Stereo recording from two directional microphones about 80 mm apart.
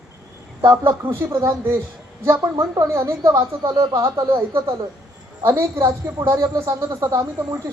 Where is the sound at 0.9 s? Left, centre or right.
Right.